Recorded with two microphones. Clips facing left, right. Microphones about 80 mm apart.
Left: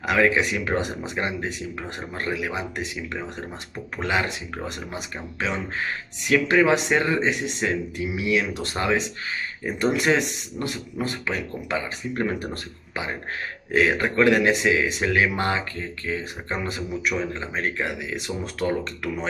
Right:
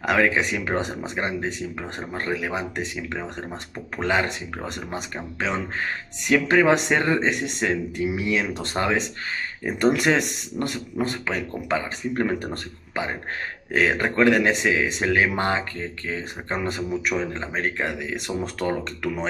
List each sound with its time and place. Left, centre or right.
0.0 s speech: right
6.2 s speech: right
13.7 s speech: right